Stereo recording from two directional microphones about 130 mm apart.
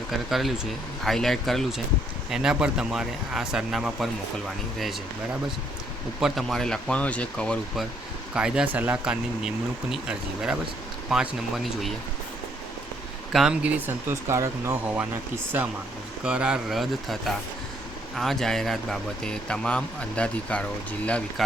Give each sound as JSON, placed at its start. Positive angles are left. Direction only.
{"t": 0.1, "sound": "speech", "side_deg": 0}
{"t": 6.1, "sound": "speech", "side_deg": 0}
{"t": 8.3, "sound": "speech", "side_deg": -5}
{"t": 13.3, "sound": "speech", "side_deg": -5}
{"t": 16.2, "sound": "speech", "side_deg": -5}